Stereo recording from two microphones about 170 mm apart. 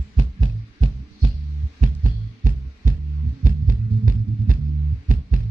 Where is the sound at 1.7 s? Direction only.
50° right (ahead or behind).